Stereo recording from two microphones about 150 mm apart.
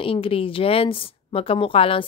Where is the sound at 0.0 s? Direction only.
35° left (ahead or behind).